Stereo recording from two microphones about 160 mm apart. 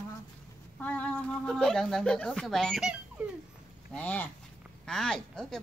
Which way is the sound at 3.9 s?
10° left (ahead or behind).